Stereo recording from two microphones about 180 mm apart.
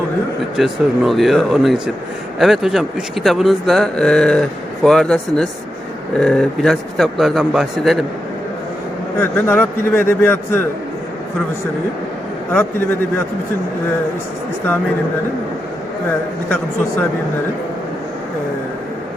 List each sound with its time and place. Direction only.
0.5 s a man's voice: centre (ahead or behind)
9.1 s speech: 10° left (ahead or behind)